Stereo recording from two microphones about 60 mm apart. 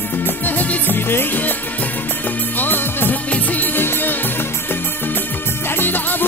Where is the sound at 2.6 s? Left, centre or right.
Left.